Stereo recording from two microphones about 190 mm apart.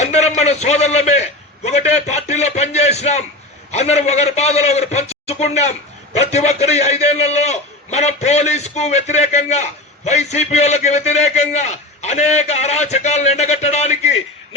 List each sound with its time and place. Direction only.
0.0 s a man's voice: 35° left (ahead or behind)